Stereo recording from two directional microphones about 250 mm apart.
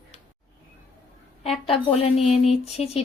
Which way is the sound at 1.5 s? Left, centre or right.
Left.